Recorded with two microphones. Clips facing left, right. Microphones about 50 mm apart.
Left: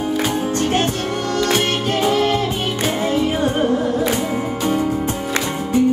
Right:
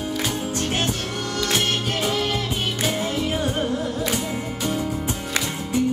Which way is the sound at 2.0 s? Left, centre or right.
Centre.